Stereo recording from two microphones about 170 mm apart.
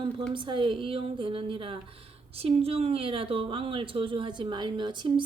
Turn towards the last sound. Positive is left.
turn(degrees=-25)  # may be behind; listen again after turning